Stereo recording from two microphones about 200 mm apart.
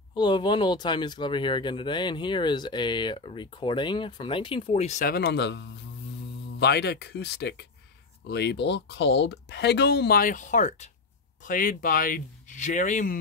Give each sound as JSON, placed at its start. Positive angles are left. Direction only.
{"t": 0.1, "sound": "speech", "side_deg": 20}
{"t": 5.0, "sound": "speech", "side_deg": 55}